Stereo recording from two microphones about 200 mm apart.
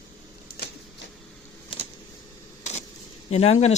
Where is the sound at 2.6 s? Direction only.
35° left (ahead or behind).